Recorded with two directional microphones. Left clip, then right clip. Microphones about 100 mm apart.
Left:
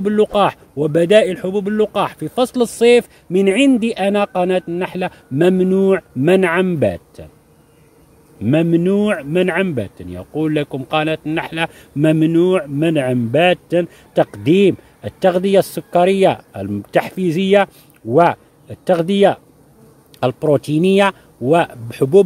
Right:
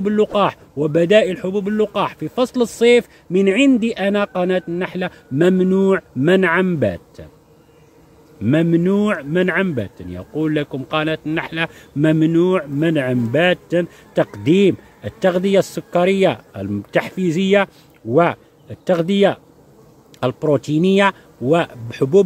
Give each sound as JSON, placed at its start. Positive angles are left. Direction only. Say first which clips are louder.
{"t": 0.0, "sound": "speech", "louder": "left 2 dB", "side_deg": 20}
{"t": 8.4, "sound": "speech", "louder": "left 1 dB", "side_deg": 10}